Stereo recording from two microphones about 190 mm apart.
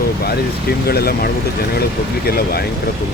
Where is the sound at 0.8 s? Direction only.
55° left (ahead or behind).